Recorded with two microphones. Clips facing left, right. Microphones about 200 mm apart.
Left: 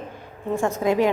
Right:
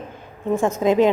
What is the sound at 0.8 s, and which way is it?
Speech, 20° right (ahead or behind).